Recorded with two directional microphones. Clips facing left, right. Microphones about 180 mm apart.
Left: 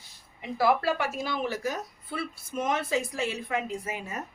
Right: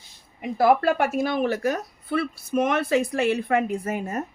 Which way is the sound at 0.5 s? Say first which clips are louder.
Right 6 dB; 50° right (ahead or behind).